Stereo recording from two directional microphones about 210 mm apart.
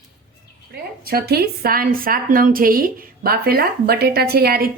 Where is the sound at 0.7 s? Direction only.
45° right (ahead or behind).